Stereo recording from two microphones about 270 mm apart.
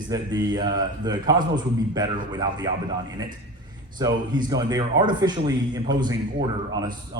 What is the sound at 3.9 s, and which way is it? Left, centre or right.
A man's voice, centre.